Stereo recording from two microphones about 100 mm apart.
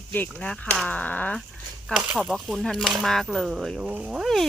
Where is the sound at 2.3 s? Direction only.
5° left (ahead or behind); by 4.3 s 10° right (ahead or behind).